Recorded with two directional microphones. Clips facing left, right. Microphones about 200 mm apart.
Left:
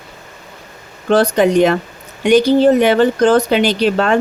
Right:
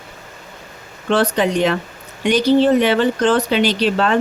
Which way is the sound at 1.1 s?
45° left (ahead or behind).